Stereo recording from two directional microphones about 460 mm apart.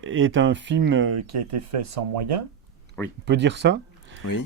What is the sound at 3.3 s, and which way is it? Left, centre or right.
Speech, right.